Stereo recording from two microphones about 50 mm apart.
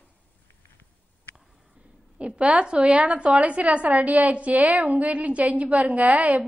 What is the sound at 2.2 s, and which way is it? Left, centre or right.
A woman's voice, right.